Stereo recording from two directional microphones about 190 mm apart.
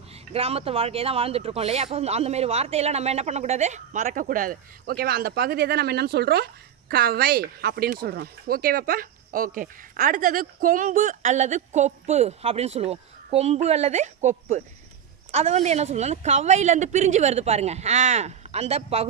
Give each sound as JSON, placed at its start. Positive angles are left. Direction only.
{"t": 0.3, "sound": "speech", "side_deg": -30}